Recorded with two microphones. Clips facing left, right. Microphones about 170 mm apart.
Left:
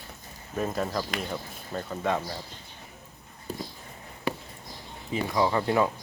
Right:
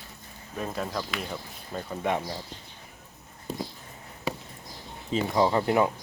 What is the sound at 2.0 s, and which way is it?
Speech, 20° right (ahead or behind).